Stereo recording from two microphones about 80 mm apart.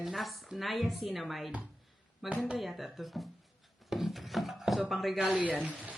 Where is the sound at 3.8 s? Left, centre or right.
Centre.